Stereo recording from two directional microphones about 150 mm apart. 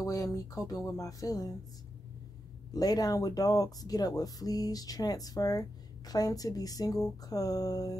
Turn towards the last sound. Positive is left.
turn(degrees=25)  # may be behind; listen again after turning